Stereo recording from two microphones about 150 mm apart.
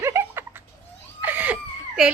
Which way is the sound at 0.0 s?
15° right (ahead or behind).